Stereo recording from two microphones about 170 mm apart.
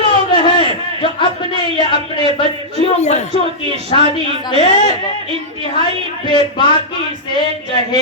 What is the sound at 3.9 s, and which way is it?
Speech, 30° left (ahead or behind).